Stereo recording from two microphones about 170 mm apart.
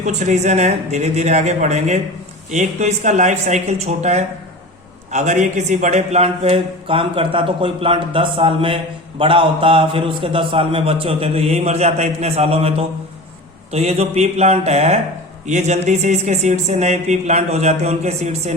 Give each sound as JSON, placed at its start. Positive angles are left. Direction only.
{"t": 0.0, "sound": "speech", "side_deg": -45}